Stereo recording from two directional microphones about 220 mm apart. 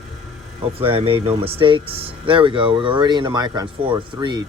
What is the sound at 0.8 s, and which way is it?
Speech, 25° right (ahead or behind).